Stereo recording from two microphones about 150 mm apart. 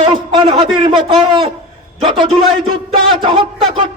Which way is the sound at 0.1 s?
35° right (ahead or behind).